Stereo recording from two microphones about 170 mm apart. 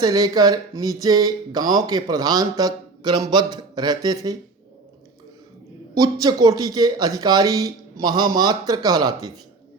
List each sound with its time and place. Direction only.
0.0 s a man's voice: 20° right (ahead or behind)
5.9 s a man's voice: 20° right (ahead or behind)